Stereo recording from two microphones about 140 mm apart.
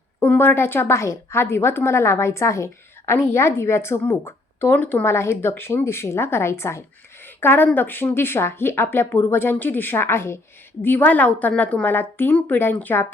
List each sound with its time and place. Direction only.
0.2 s speech: 15° left (ahead or behind)